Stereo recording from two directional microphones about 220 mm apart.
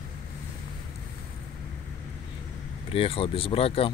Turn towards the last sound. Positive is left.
turn(degrees=25)  # may be behind; listen again after turning